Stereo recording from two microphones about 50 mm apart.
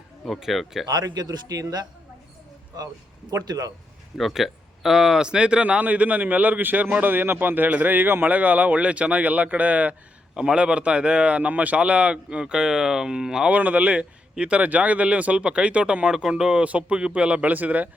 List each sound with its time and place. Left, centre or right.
0.3 s speech: centre
4.2 s speech: centre; by 8.3 s right
8.3 s speech: right
10.3 s speech: centre
13.5 s speech: right